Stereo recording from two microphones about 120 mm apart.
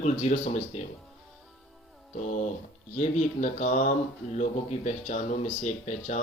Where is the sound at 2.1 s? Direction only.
85° left.